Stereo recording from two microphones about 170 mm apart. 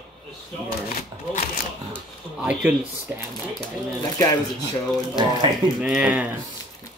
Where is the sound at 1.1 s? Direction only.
25° right (ahead or behind).